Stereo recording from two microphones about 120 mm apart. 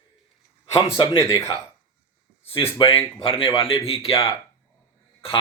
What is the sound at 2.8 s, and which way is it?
Speech, 45° left (ahead or behind).